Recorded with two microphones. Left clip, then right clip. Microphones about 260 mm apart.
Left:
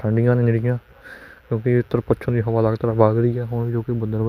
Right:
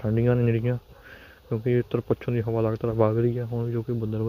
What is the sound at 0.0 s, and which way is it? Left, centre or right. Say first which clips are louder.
Speech: left 4 dB; left.